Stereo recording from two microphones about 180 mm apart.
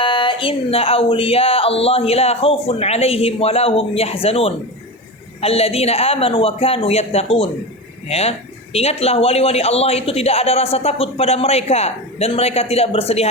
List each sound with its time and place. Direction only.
0.0 s speech: 25° left (ahead or behind)